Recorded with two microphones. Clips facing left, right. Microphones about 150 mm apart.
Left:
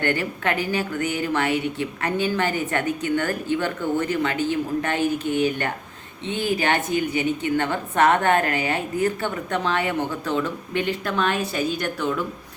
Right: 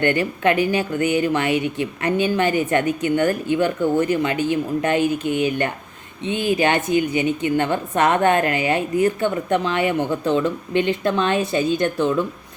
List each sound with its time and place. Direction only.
0.0 s a woman's voice: 20° right (ahead or behind)